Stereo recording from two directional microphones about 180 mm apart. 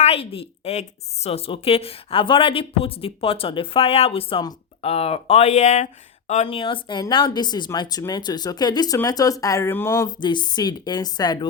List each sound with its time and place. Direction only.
0.0 s a woman's voice: 35° left (ahead or behind)